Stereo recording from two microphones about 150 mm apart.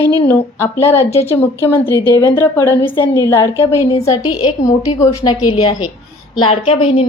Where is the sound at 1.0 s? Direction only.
45° left (ahead or behind).